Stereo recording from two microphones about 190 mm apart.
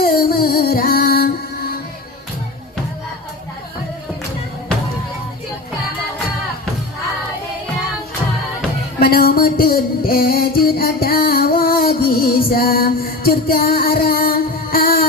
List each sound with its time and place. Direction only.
0.0 s music: 50° left (ahead or behind)
9.0 s music: 55° left (ahead or behind)